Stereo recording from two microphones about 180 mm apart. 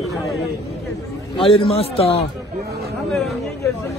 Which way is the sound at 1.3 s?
30° left (ahead or behind).